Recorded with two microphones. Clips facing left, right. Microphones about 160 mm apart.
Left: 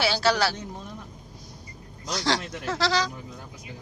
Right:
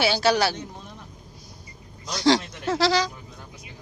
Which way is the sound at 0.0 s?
15° right (ahead or behind).